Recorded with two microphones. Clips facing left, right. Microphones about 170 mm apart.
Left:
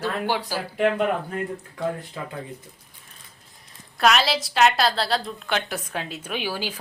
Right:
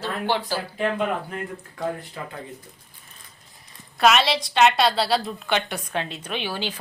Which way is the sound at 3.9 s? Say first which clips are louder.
Right 1 dB; centre (ahead or behind).